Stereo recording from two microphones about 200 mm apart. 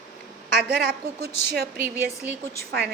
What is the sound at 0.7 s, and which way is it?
Speech, 50° right (ahead or behind).